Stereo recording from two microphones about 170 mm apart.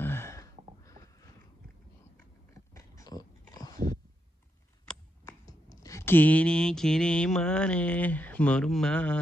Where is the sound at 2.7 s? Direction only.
20° left (ahead or behind).